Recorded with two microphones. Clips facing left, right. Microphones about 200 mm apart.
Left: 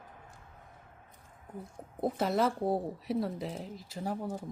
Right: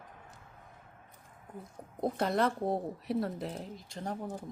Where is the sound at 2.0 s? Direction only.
Centre (ahead or behind).